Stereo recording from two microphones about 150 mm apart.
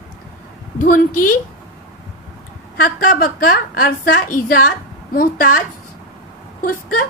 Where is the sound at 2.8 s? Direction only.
80° left.